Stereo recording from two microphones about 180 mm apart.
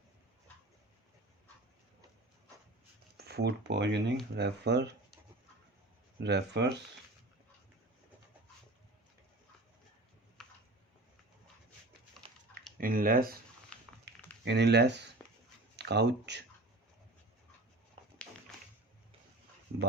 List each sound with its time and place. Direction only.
3.2 s speech: 65° right (ahead or behind)
6.1 s speech: 70° right (ahead or behind)
10.4 s a sound: 5° left (ahead or behind)
12.8 s speech: 50° right (ahead or behind)
14.1 s a sound: 70° right (ahead or behind)
14.4 s speech: 70° right (ahead or behind)